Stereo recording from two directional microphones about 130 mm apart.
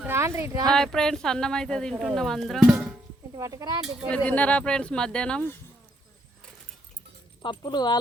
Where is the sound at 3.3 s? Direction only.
30° right (ahead or behind).